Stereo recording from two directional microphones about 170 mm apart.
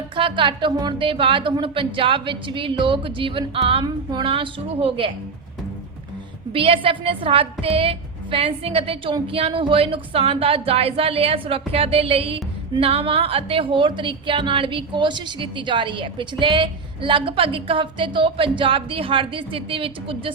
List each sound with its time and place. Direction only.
0.2 s speech: 30° right (ahead or behind)
6.5 s speech: 30° right (ahead or behind)